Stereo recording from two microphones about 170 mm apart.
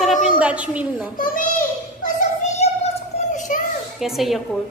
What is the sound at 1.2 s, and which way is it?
Child singing, 50° left (ahead or behind).